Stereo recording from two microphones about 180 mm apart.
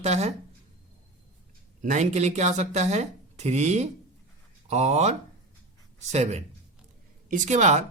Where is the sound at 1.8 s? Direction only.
40° right (ahead or behind).